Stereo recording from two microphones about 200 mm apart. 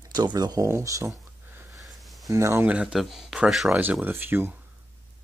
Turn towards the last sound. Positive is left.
turn(degrees=-10)  # may be behind; listen again after turning